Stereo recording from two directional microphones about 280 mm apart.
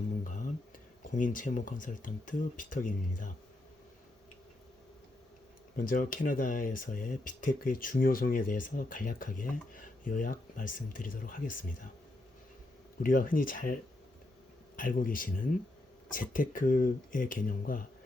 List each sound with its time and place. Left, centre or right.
0.3 s music: left
1.1 s speech: left
5.7 s speech: left
13.0 s speech: left
14.8 s speech: left